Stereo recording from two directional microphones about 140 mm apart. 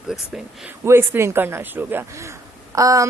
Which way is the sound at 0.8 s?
20° right (ahead or behind).